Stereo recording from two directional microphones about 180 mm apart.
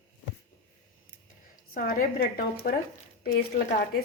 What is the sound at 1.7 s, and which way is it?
A woman's voice, 55° left (ahead or behind).